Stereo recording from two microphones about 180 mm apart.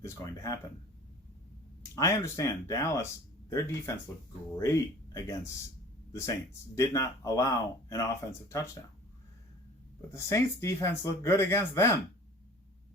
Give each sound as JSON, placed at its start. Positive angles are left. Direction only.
{"t": 0.0, "sound": "speech", "side_deg": 15}
{"t": 2.0, "sound": "speech", "side_deg": 20}
{"t": 6.7, "sound": "speech", "side_deg": 15}
{"t": 10.1, "sound": "speech", "side_deg": 15}